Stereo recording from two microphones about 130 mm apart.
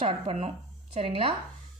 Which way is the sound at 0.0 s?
50° right (ahead or behind).